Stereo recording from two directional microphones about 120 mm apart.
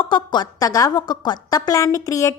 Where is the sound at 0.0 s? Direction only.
40° left (ahead or behind).